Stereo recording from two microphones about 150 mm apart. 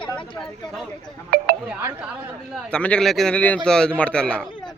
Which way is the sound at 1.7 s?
15° right (ahead or behind).